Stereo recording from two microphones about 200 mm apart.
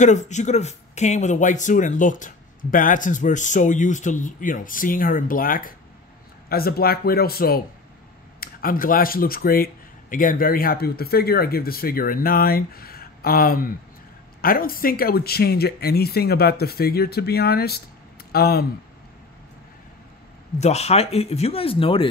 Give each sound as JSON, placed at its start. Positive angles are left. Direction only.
{"t": 0.0, "sound": "speech", "side_deg": 35}
{"t": 20.5, "sound": "speech", "side_deg": 35}